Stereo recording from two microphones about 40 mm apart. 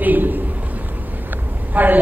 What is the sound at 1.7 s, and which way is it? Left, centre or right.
Speech, right.